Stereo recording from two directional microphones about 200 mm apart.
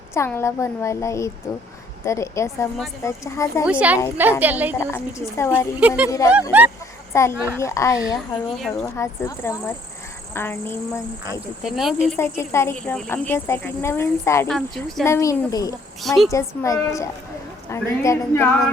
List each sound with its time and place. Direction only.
0.1 s speech: 15° left (ahead or behind)
3.7 s a woman's voice: 5° right (ahead or behind)
4.8 s speech: 10° left (ahead or behind)
6.5 s a woman's voice: 10° right (ahead or behind)
7.1 s speech: 15° left (ahead or behind)
8.1 s speech: centre (ahead or behind)
9.0 s speech: 15° left (ahead or behind)
11.6 s speech: centre (ahead or behind)
12.1 s speech: 10° left (ahead or behind)
16.0 s speech: centre (ahead or behind)
16.3 s speech: 15° left (ahead or behind)